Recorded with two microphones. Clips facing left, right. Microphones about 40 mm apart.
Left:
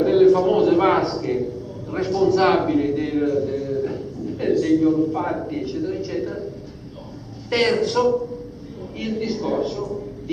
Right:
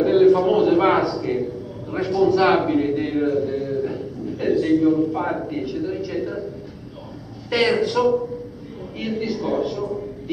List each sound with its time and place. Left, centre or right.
0.0 s a man's voice: centre
7.4 s a man's voice: centre